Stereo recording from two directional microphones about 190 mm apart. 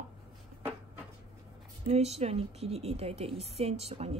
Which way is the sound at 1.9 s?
35° right (ahead or behind).